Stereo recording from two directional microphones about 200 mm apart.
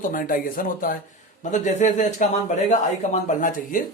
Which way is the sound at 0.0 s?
40° left (ahead or behind).